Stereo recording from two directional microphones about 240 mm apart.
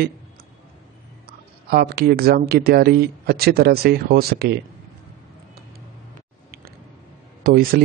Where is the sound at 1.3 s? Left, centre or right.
Right.